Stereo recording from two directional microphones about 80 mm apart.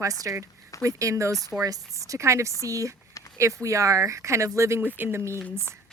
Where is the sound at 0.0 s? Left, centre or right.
Right.